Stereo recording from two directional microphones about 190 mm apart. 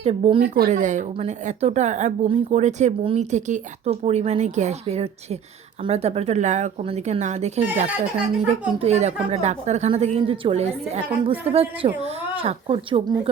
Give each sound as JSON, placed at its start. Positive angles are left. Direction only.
{"t": 0.0, "sound": "speech", "side_deg": -30}
{"t": 0.5, "sound": "speech", "side_deg": -45}